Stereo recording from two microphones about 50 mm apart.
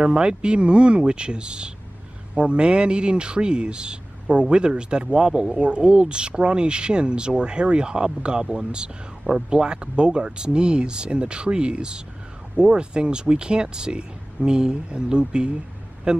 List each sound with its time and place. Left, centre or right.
0.0 s a man's voice: centre